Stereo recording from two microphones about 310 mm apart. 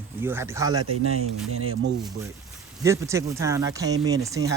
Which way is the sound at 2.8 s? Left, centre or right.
Centre.